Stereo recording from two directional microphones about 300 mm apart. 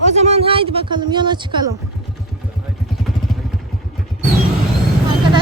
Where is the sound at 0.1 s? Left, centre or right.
Right.